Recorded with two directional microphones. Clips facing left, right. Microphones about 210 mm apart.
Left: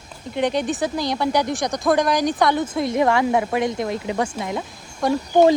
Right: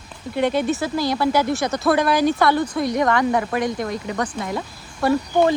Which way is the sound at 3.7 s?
25° left (ahead or behind).